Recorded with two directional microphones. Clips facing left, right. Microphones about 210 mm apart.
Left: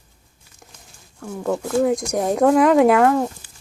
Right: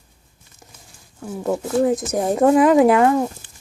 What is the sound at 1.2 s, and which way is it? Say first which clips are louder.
Speech: right 1 dB; 5° right (ahead or behind).